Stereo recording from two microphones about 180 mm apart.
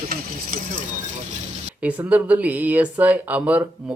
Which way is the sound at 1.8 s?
10° right (ahead or behind).